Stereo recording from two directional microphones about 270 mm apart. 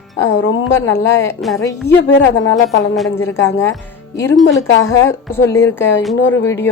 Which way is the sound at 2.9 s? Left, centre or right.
Centre.